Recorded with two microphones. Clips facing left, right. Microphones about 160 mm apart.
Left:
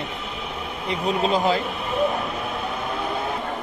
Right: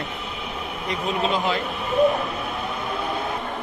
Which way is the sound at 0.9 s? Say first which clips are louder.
Left 2 dB; 40° left (ahead or behind).